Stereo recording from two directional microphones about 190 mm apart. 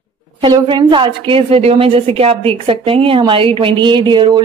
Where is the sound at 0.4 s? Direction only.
25° right (ahead or behind).